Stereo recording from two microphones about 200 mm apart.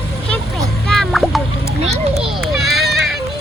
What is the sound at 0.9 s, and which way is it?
Music, centre (ahead or behind).